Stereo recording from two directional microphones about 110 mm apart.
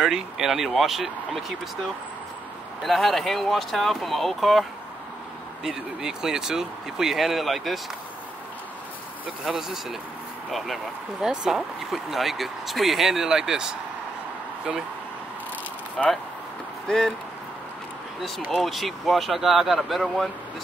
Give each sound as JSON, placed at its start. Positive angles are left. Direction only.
{"t": 0.0, "sound": "speech", "side_deg": -5}
{"t": 2.8, "sound": "speech", "side_deg": 0}
{"t": 9.5, "sound": "speech", "side_deg": -5}
{"t": 16.0, "sound": "speech", "side_deg": 5}
{"t": 18.5, "sound": "speech", "side_deg": 0}